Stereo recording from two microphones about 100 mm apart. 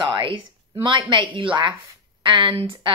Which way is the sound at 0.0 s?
50° right (ahead or behind).